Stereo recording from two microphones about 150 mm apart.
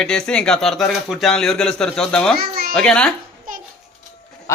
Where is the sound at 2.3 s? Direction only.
90° right.